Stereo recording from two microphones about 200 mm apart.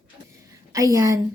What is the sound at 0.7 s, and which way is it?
Speech, 15° right (ahead or behind).